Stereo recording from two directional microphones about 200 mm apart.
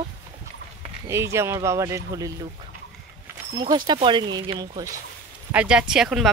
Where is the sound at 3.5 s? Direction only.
20° right (ahead or behind).